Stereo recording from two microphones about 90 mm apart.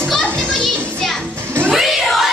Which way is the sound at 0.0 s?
10° left (ahead or behind).